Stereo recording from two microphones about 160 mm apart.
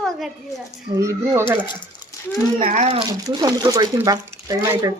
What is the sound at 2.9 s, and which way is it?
Speech, 30° right (ahead or behind).